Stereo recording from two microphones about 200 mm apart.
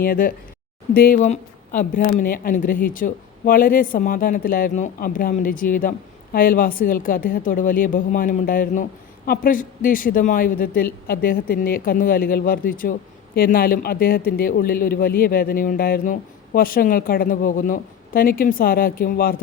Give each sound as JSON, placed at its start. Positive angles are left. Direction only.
{"t": 0.0, "sound": "a woman's voice", "side_deg": 45}